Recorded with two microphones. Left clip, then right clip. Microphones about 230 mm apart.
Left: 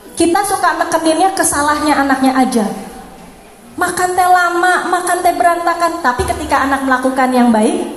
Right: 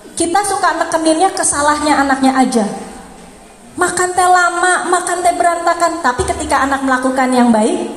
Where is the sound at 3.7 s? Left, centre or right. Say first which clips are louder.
Even; right.